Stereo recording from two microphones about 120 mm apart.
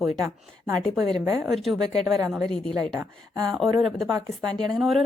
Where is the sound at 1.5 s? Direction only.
Centre (ahead or behind).